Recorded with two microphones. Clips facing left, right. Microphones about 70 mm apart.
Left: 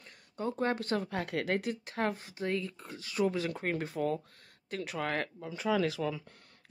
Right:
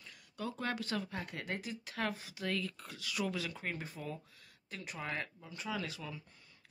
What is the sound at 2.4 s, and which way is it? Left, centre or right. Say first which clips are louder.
Speech: left 4 dB; left.